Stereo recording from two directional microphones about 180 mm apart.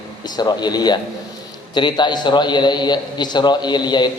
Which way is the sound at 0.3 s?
25° left (ahead or behind).